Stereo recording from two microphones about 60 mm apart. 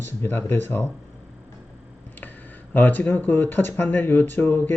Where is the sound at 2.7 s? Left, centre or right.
Left.